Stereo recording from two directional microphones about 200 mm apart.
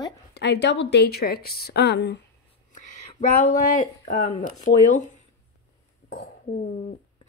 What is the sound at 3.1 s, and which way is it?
Speech, 40° left (ahead or behind).